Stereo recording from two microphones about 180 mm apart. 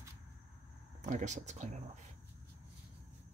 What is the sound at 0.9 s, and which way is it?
Speech, 40° right (ahead or behind).